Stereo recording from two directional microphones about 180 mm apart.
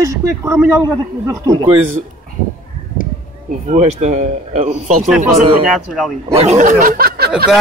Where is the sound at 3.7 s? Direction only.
40° right (ahead or behind).